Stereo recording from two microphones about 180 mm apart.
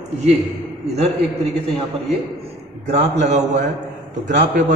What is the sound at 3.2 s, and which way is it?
A man's voice, 40° right (ahead or behind).